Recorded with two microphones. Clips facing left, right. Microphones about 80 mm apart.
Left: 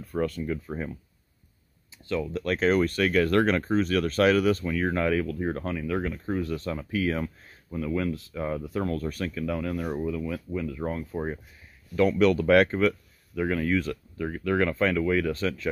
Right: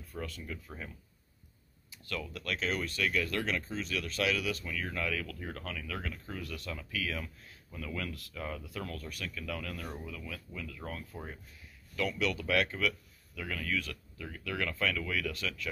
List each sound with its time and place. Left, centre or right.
0.0 s speech: left
0.5 s speech: left
2.0 s speech: left
2.4 s speech: left
7.7 s speech: left
11.9 s speech: left